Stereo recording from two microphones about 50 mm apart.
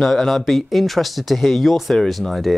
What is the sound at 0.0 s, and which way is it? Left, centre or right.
Speech, centre.